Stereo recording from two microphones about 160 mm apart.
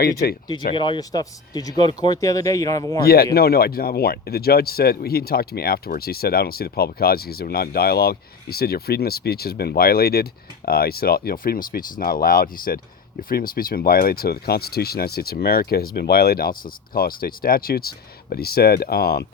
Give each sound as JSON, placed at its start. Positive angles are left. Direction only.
{"t": 0.0, "sound": "speech", "side_deg": 75}
{"t": 0.7, "sound": "speech", "side_deg": 30}
{"t": 3.0, "sound": "speech", "side_deg": 70}